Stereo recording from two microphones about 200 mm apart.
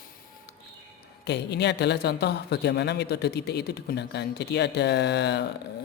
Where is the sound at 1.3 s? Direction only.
55° left (ahead or behind).